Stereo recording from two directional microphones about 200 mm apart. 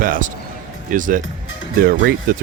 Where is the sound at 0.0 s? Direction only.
45° right (ahead or behind).